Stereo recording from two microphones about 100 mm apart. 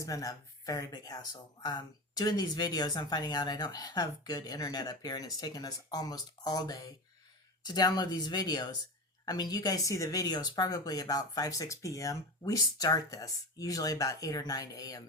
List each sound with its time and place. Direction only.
0.0 s speech: 35° left (ahead or behind)